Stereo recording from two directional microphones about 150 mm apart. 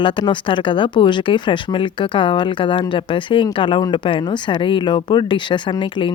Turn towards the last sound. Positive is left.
turn(degrees=30)  # may be behind; listen again after turning